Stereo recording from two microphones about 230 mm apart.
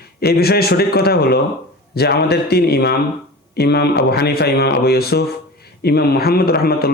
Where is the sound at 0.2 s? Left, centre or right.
Left.